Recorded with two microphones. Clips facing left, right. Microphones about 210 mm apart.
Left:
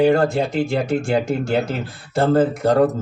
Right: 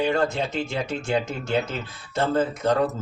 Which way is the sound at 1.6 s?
35° left (ahead or behind).